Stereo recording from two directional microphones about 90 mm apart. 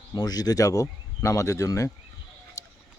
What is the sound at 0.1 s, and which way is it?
Speech, 45° left (ahead or behind).